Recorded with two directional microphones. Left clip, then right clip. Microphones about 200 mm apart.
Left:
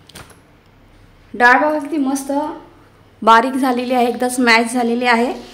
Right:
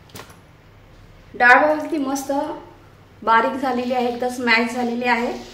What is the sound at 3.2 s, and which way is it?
A woman's voice, 60° left (ahead or behind).